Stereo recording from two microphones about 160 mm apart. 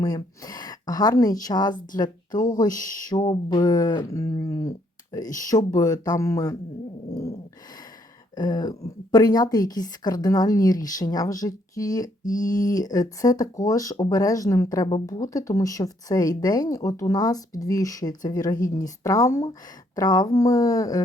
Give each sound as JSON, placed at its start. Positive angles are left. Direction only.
{"t": 0.0, "sound": "a woman's voice", "side_deg": 25}
{"t": 8.4, "sound": "a woman's voice", "side_deg": 25}